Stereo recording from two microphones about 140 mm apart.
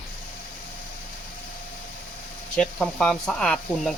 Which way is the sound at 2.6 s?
10° left (ahead or behind).